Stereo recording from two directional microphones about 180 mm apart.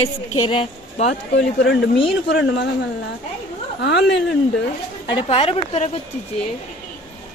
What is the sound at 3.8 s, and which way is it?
Speech, 75° left (ahead or behind).